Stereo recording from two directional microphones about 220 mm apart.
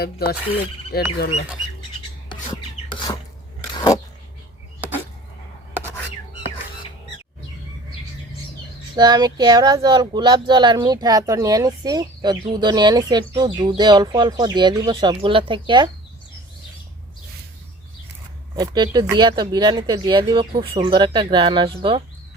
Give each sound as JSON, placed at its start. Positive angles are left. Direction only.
{"t": 0.0, "sound": "speech", "side_deg": 45}
{"t": 9.0, "sound": "speech", "side_deg": -20}
{"t": 18.5, "sound": "speech", "side_deg": -20}